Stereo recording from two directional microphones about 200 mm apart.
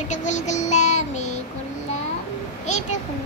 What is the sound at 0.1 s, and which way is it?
Child singing, 35° left (ahead or behind).